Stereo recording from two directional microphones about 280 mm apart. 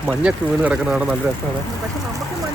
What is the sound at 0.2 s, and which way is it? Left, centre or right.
Speech, centre.